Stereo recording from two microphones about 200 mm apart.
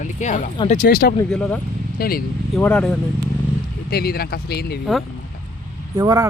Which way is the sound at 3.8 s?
50° left (ahead or behind).